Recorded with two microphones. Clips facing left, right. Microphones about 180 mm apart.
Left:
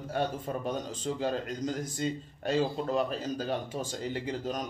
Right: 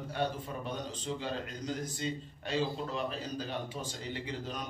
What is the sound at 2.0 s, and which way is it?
A man's voice, 45° left (ahead or behind).